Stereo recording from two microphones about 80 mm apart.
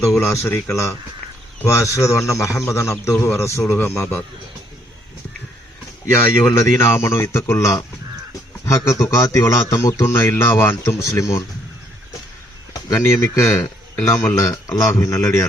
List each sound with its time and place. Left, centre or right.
0.2 s a man's voice: left
6.1 s a man's voice: left
13.1 s a man's voice: left